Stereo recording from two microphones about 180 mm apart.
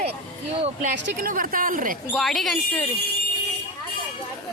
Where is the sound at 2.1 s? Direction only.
Centre (ahead or behind).